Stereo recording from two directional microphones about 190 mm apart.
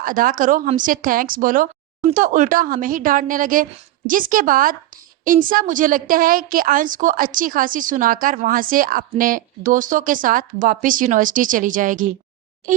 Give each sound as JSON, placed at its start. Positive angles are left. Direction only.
{"t": 0.0, "sound": "a woman's voice", "side_deg": -45}